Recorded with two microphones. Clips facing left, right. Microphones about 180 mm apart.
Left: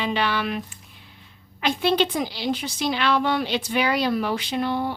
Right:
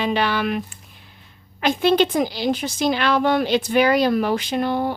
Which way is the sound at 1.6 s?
45° right (ahead or behind).